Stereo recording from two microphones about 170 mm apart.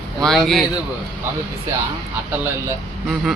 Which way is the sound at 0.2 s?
Centre (ahead or behind).